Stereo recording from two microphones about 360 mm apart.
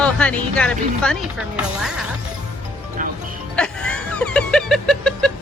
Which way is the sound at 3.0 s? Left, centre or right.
Right.